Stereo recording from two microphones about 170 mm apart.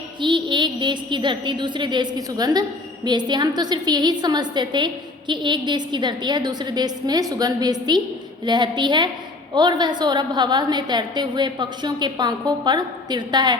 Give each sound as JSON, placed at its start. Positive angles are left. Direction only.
{"t": 0.2, "sound": "a woman's voice", "side_deg": -25}